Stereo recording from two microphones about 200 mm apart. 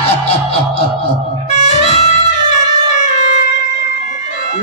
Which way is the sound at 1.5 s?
35° left (ahead or behind).